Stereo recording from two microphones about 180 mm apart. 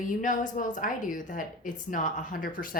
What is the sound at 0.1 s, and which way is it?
A woman's voice, 45° left (ahead or behind).